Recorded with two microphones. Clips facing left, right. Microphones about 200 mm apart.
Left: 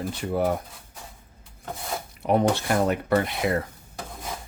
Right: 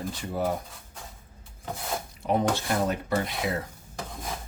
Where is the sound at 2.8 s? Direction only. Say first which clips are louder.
Left 5 dB; 60° left (ahead or behind).